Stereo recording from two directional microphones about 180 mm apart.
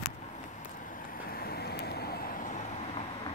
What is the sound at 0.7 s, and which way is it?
Vehicle, 50° left (ahead or behind).